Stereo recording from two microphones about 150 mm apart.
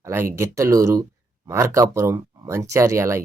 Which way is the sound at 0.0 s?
15° right (ahead or behind).